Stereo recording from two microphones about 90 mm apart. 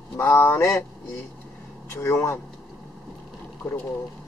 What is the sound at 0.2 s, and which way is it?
Speech, 25° left (ahead or behind).